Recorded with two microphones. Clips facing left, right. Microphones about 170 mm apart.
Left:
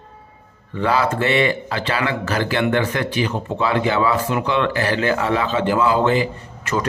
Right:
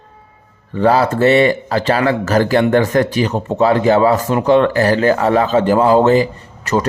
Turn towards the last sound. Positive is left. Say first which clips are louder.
# right 5 dB
turn(degrees=-40)  # may be behind; listen again after turning